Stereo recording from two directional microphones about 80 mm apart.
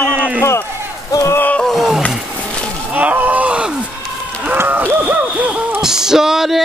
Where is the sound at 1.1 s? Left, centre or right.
Left.